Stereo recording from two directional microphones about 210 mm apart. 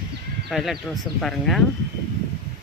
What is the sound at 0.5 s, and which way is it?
Speech, centre (ahead or behind).